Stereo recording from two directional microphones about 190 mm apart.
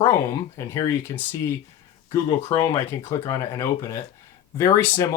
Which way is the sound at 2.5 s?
20° left (ahead or behind).